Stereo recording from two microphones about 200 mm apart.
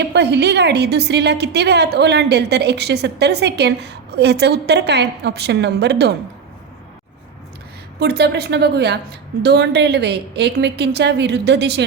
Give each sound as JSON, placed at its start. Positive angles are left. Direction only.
{"t": 0.0, "sound": "a woman's voice", "side_deg": -60}
{"t": 7.9, "sound": "a woman's voice", "side_deg": -55}